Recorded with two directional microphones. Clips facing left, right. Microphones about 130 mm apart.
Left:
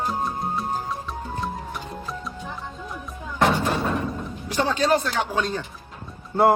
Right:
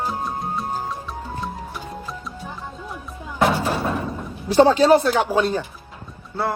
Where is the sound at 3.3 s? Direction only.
10° right (ahead or behind).